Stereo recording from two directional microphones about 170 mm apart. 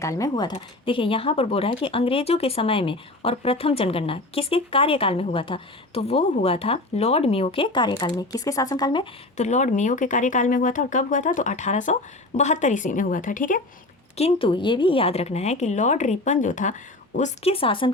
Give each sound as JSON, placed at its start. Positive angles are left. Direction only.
{"t": 0.0, "sound": "speech", "side_deg": 20}
{"t": 9.4, "sound": "speech", "side_deg": 45}
{"t": 14.2, "sound": "speech", "side_deg": 35}